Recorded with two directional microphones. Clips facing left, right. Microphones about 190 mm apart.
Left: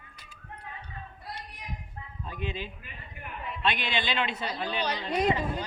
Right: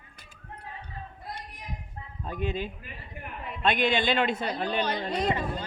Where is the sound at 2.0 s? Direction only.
45° right (ahead or behind).